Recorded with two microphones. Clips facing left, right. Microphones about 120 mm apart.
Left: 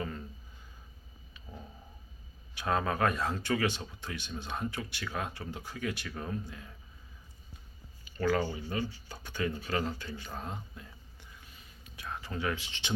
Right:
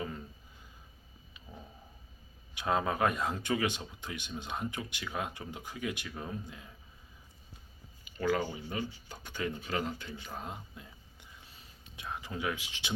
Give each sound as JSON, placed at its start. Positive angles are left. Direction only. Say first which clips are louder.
{"t": 0.0, "sound": "a sound", "louder": "left 1 dB", "side_deg": -10}
{"t": 2.6, "sound": "speech", "louder": "even", "side_deg": -15}
{"t": 8.0, "sound": "speech", "louder": "left 1 dB", "side_deg": -15}